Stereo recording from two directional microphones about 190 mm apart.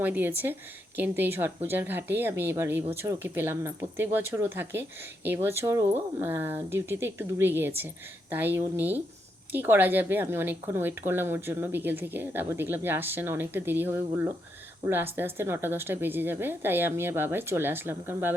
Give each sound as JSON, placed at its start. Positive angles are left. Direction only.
{"t": 0.0, "sound": "speech", "side_deg": -10}